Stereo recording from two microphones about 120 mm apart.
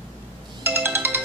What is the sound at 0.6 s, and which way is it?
Ringtone, 20° right (ahead or behind).